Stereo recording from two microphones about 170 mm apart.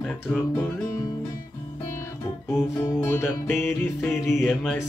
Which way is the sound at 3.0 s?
15° left (ahead or behind).